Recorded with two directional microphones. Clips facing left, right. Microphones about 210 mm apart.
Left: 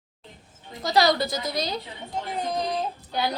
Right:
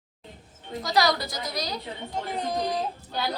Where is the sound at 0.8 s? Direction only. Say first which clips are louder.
Left 3 dB; 25° left (ahead or behind).